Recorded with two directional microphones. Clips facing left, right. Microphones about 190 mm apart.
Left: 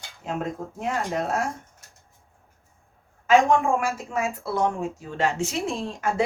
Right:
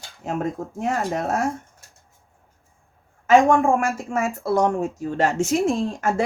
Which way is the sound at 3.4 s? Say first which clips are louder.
Right 3 dB; 50° right (ahead or behind).